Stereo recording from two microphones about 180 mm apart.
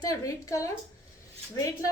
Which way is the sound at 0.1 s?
20° left (ahead or behind).